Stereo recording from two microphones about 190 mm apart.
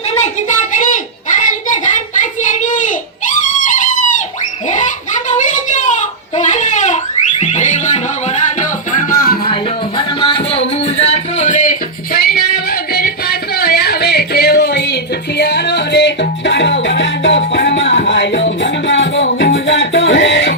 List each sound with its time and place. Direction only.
0.1 s a sound: 40° left (ahead or behind)
3.2 s music: 45° left (ahead or behind)
4.7 s a sound: 40° left (ahead or behind)
8.9 s music: 45° left (ahead or behind)
10.0 s music: 30° left (ahead or behind); by 19.3 s 80° left
19.3 s music: 55° left (ahead or behind)
19.5 s music: 80° left